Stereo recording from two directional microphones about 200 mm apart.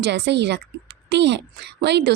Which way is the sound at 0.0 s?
60° right (ahead or behind).